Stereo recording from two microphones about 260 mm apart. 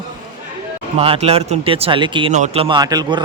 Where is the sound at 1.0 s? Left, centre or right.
Right.